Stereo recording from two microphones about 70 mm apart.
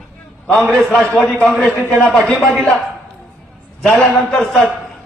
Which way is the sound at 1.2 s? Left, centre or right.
Centre.